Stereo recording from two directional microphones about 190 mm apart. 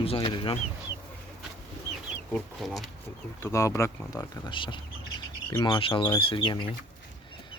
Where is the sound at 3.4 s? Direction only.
15° left (ahead or behind).